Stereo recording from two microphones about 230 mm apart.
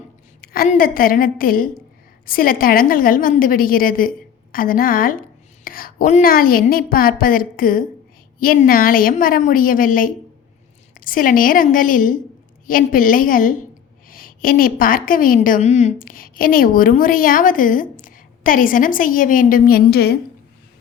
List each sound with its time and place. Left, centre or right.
0.4 s a woman's voice: left